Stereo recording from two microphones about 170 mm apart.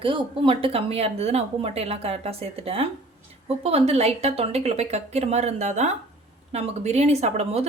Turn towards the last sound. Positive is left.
turn(degrees=-40)  # may be behind; listen again after turning